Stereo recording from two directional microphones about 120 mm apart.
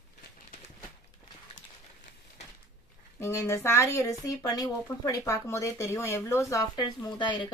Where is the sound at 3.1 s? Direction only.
20° left (ahead or behind).